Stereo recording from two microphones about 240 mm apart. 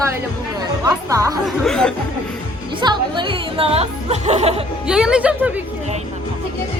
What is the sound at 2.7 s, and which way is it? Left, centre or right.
Speech, centre.